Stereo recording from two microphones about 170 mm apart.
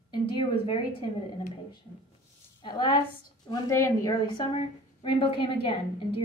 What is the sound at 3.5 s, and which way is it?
Speech, 15° left (ahead or behind).